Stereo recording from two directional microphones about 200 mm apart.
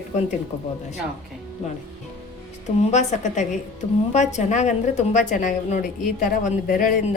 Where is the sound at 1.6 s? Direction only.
35° left (ahead or behind).